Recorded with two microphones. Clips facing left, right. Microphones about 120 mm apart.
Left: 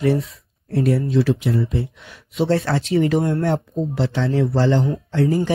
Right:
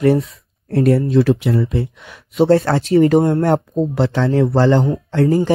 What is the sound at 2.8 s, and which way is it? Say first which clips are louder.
Speech: right 6 dB; 55° right (ahead or behind).